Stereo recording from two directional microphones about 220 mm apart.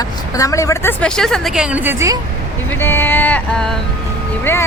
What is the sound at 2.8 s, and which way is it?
Speech, 10° left (ahead or behind).